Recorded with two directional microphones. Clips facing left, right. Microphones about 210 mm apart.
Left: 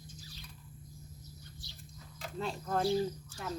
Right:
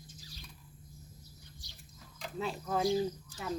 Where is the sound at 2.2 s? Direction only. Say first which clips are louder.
Right 1 dB; centre (ahead or behind).